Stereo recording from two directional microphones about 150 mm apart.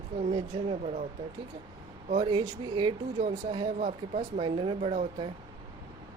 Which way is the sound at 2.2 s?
30° right (ahead or behind).